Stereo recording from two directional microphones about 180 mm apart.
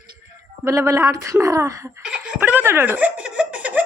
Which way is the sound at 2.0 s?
5° right (ahead or behind).